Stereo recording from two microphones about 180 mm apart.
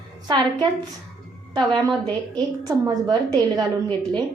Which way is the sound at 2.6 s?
20° right (ahead or behind).